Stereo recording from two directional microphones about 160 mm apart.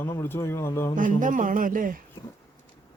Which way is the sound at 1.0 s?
55° right (ahead or behind).